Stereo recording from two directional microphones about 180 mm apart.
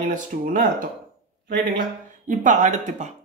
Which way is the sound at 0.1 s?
45° right (ahead or behind).